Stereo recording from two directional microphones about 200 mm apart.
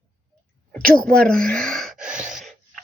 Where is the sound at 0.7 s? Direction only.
5° left (ahead or behind).